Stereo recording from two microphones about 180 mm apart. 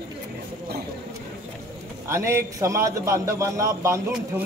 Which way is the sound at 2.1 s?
15° right (ahead or behind).